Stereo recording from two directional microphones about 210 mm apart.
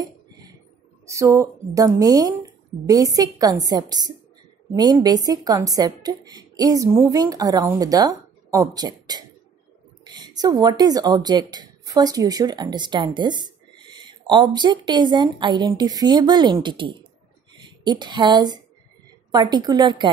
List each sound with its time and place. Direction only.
1.0 s a woman's voice: 15° right (ahead or behind)